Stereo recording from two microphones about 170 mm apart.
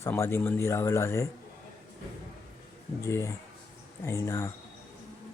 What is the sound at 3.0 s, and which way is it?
Speech, 15° left (ahead or behind).